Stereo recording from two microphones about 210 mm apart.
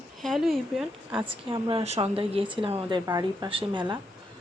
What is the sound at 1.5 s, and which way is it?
Speech, 20° right (ahead or behind).